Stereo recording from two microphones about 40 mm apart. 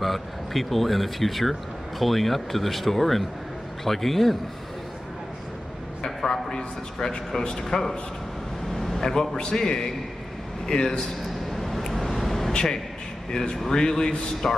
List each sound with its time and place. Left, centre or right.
0.0 s speech: centre
6.0 s a man's voice: centre
11.5 s vehicle: centre
12.5 s speech: centre